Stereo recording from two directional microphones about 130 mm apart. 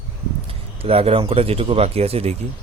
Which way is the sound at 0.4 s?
45° right (ahead or behind).